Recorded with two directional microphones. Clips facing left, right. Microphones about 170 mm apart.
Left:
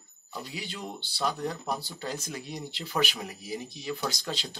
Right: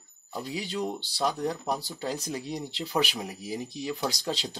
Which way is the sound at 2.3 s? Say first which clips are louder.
Right 4 dB; 30° right (ahead or behind).